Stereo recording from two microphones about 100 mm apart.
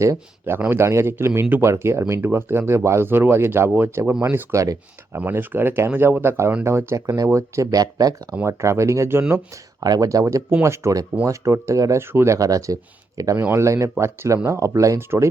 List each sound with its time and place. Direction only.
0.0 s speech: 25° right (ahead or behind)
9.8 s speech: 40° right (ahead or behind)